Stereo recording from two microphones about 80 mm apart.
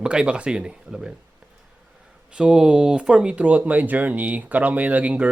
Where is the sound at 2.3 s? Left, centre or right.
Centre.